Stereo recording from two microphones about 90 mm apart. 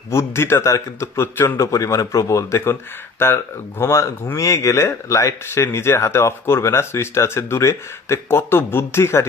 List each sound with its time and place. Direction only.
0.1 s speech: 30° left (ahead or behind)
1.7 s speech: 35° left (ahead or behind)